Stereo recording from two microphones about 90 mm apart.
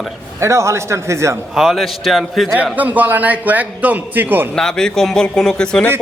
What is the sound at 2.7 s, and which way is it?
A man's voice, 20° right (ahead or behind).